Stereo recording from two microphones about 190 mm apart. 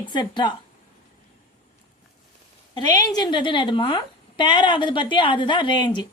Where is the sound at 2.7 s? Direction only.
20° left (ahead or behind).